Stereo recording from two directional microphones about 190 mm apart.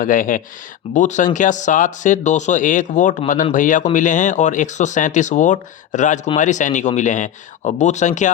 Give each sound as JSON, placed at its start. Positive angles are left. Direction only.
{"t": 0.0, "sound": "speech", "side_deg": 45}